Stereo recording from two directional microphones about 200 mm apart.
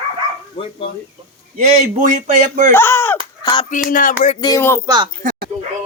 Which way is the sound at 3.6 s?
40° left (ahead or behind).